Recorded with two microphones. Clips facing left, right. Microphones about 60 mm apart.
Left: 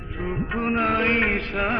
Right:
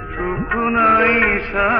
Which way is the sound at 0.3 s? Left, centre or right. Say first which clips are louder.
Right 6 dB; right.